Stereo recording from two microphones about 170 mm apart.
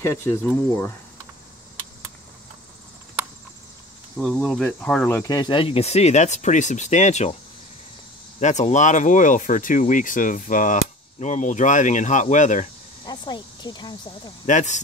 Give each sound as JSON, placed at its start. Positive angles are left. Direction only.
{"t": 0.0, "sound": "speech", "side_deg": 15}
{"t": 4.2, "sound": "speech", "side_deg": 0}
{"t": 5.1, "sound": "speech", "side_deg": 20}
{"t": 8.4, "sound": "speech", "side_deg": 45}
{"t": 13.0, "sound": "speech", "side_deg": 25}
{"t": 14.4, "sound": "speech", "side_deg": 45}